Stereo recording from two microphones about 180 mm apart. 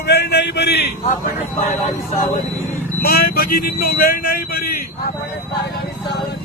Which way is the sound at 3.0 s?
60° left (ahead or behind).